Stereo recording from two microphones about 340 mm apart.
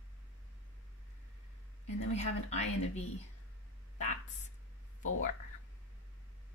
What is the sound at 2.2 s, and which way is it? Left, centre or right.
Speech, centre.